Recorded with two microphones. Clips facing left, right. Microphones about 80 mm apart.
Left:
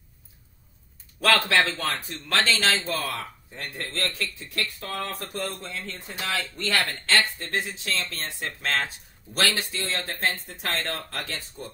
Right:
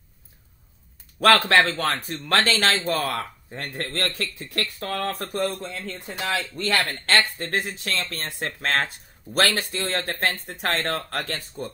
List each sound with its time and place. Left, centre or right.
1.2 s a man's voice: right
6.5 s a man's voice: right